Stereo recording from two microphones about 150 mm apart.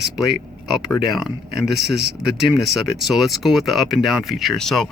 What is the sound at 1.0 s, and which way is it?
Speech, centre (ahead or behind).